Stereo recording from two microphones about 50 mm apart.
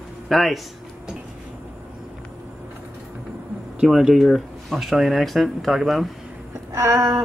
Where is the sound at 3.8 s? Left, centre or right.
Centre.